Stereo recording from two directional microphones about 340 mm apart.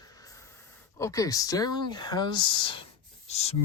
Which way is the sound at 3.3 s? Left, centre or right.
Centre.